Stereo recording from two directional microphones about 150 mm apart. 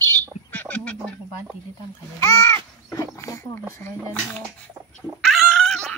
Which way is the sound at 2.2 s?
20° left (ahead or behind).